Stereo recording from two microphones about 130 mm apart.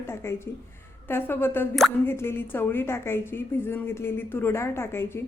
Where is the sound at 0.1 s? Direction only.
20° left (ahead or behind).